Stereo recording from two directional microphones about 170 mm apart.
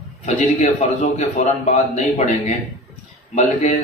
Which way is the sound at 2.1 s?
45° left (ahead or behind).